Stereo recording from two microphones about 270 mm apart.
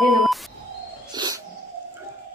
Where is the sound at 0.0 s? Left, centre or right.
Centre.